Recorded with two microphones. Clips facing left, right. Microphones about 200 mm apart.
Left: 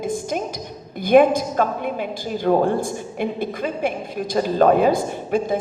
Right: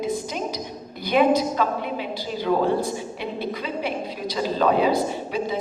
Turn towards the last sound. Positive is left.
turn(degrees=50)  # may be behind; listen again after turning